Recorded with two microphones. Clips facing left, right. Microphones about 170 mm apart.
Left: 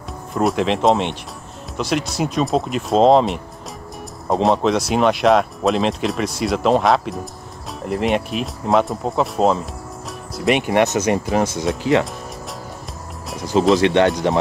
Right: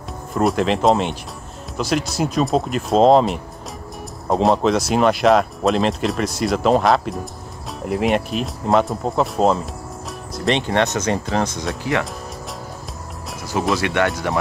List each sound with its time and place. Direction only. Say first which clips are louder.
0.3 s speech: even; centre (ahead or behind)
10.0 s music: left 2 dB; centre (ahead or behind)
10.6 s speech: left 3 dB; 10° left (ahead or behind)
13.7 s speech: left 5 dB; 20° left (ahead or behind)